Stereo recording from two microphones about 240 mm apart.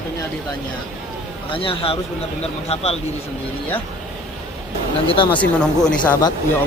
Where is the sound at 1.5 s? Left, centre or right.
Left.